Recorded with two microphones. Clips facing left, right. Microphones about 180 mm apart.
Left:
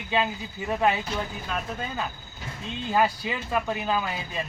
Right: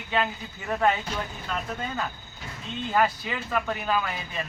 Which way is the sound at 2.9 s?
10° left (ahead or behind).